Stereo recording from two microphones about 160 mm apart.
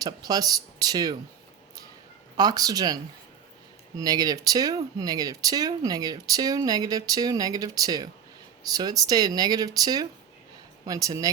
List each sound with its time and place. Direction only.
0.0 s speech: 25° right (ahead or behind)
2.3 s speech: 25° right (ahead or behind)